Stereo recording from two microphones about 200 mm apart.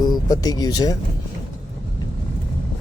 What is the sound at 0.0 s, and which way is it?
Speech, 20° left (ahead or behind).